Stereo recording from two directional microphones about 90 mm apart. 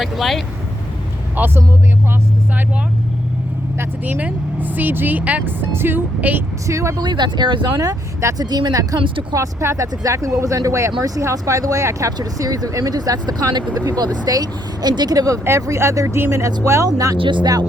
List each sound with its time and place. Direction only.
0.0 s speech: centre (ahead or behind)
1.4 s speech: 20° right (ahead or behind)
3.8 s speech: 20° right (ahead or behind)
6.7 s speech: 35° right (ahead or behind)
7.0 s speech: 55° right (ahead or behind)
7.8 s speech: 40° right (ahead or behind)
8.4 s speech: 50° right (ahead or behind)
9.0 s speech: 70° right (ahead or behind)
9.3 s speech: 35° right (ahead or behind)
15.4 s speech: 35° right (ahead or behind)
17.2 s speech: 65° right (ahead or behind)